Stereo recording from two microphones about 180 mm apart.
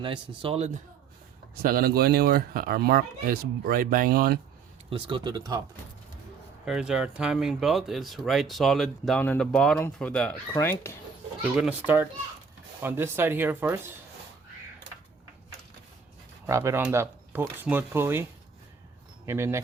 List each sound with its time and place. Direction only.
0.0 s a man's voice: 25° right (ahead or behind)
1.6 s speech: 55° right (ahead or behind)
4.9 s speech: 30° right (ahead or behind)
6.7 s speech: 5° right (ahead or behind); by 10.9 s 15° left (ahead or behind)
11.5 s speech: 5° right (ahead or behind)
12.8 s speech: 10° right (ahead or behind)
16.5 s speech: 15° right (ahead or behind)